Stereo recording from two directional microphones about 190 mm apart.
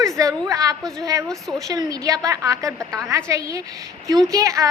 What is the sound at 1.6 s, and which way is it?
A woman's voice, 20° right (ahead or behind).